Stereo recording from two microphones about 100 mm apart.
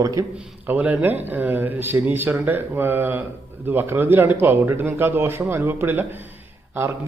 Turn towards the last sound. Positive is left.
turn(degrees=-20)  # may be behind; listen again after turning